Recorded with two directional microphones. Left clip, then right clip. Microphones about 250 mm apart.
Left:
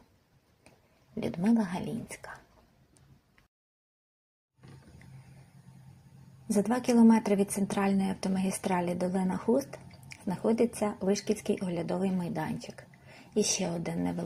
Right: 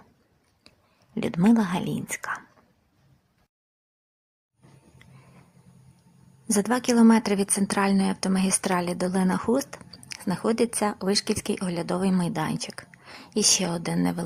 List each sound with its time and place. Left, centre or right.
1.1 s speech: centre
6.5 s speech: centre